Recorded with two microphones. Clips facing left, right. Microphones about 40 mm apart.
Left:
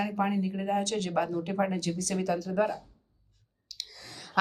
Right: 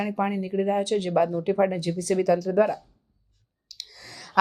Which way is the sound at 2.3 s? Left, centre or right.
Right.